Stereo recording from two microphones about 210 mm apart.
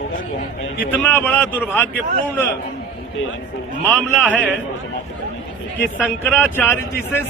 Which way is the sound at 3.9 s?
5° left (ahead or behind).